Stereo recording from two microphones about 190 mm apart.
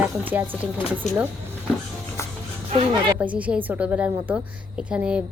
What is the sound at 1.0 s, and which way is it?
Speech, 35° left (ahead or behind).